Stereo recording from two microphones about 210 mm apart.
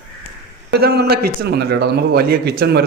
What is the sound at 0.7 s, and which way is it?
A man's voice, 50° right (ahead or behind).